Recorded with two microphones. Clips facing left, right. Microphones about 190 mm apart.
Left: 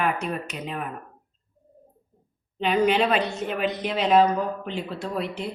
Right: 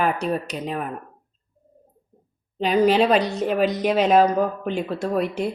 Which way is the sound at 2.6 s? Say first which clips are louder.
Right 4 dB; 40° right (ahead or behind).